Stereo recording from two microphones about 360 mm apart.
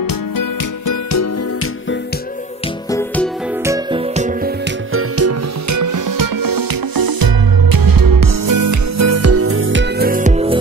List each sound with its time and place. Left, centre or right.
0.4 s music: left
2.9 s music: centre
3.6 s music: centre
4.9 s music: right; by 10.6 s centre